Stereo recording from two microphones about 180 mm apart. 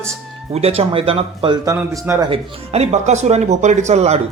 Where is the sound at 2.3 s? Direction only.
35° right (ahead or behind).